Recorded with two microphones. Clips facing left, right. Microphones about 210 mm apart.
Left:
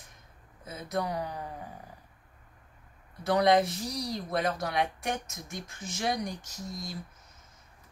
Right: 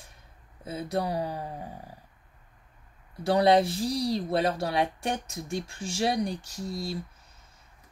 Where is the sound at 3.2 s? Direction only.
30° right (ahead or behind).